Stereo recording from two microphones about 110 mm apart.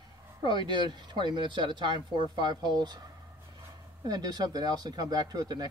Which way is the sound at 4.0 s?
40° right (ahead or behind).